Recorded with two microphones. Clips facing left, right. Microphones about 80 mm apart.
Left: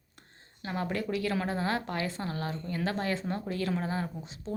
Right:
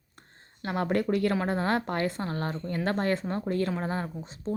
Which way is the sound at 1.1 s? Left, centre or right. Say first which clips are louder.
Right 4 dB; right.